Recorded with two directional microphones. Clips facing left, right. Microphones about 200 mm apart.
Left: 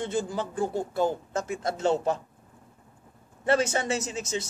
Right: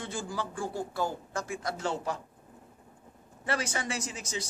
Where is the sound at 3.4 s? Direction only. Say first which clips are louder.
Left 8 dB; 25° left (ahead or behind).